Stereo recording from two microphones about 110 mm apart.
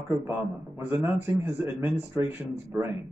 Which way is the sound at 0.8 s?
20° right (ahead or behind).